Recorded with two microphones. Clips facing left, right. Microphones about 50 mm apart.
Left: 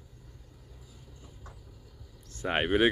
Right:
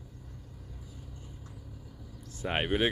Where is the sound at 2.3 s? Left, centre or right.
Centre.